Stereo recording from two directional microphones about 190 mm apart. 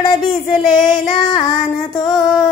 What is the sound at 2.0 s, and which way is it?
Child singing, centre (ahead or behind).